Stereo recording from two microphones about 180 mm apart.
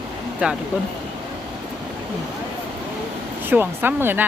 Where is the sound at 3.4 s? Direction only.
10° right (ahead or behind).